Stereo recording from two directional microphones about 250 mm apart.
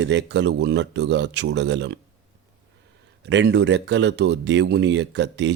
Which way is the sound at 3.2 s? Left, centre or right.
Right.